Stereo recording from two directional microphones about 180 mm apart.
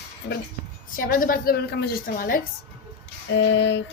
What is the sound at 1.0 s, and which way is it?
A woman's voice, 50° left (ahead or behind).